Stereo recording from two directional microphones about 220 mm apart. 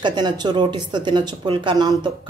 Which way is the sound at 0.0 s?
20° right (ahead or behind).